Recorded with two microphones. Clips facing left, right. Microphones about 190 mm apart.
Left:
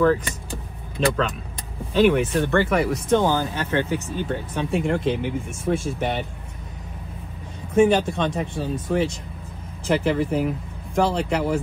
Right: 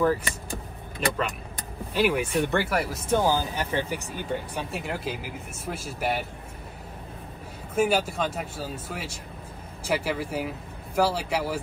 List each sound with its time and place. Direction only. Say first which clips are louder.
1.0 s speech: left 7 dB; 30° left (ahead or behind)
2.0 s speech: left 6 dB; 10° right (ahead or behind)
7.7 s speech: left 6 dB; 5° right (ahead or behind)